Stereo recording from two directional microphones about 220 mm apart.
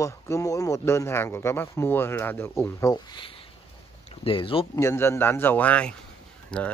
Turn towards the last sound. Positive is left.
turn(degrees=5)  # may be behind; listen again after turning